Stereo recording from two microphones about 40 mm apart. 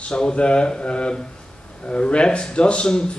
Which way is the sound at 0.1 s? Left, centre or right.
Left.